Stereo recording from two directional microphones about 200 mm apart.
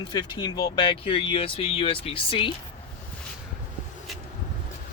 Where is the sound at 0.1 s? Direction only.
20° left (ahead or behind).